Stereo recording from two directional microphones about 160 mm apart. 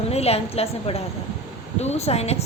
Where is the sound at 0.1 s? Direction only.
40° left (ahead or behind).